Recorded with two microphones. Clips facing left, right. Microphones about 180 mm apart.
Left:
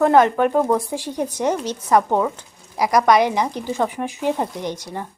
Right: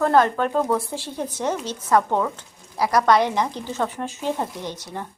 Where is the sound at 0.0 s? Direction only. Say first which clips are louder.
Left 4 dB; 15° left (ahead or behind).